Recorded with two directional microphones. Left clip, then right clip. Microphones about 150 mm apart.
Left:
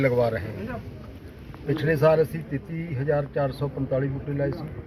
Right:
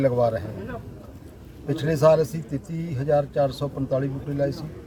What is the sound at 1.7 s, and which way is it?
A man's voice, 20° right (ahead or behind).